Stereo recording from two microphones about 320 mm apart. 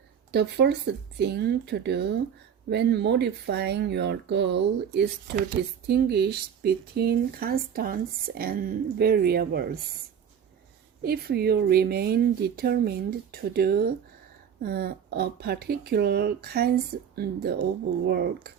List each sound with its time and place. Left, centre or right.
0.3 s speech: right
11.0 s speech: right